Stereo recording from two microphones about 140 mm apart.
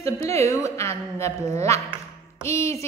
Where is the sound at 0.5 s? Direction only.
20° left (ahead or behind).